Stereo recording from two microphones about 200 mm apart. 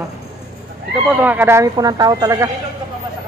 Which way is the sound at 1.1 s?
10° right (ahead or behind).